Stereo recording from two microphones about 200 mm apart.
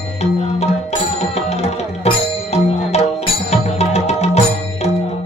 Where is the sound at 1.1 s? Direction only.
30° left (ahead or behind).